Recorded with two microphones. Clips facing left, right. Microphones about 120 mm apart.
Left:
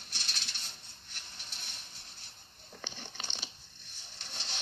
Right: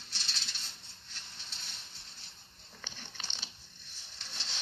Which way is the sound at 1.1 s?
30° right (ahead or behind).